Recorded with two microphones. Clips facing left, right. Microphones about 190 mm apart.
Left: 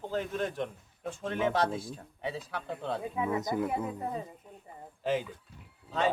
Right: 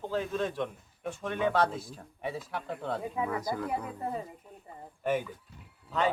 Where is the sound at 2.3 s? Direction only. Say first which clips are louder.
Right 1 dB; 20° left (ahead or behind).